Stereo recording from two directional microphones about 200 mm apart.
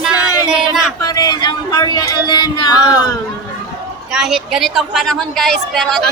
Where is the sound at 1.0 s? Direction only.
20° left (ahead or behind).